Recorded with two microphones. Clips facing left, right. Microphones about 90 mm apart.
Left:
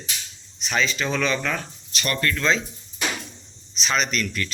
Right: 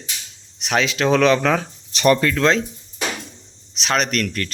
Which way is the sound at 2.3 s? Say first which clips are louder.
Right 5 dB; 70° right (ahead or behind).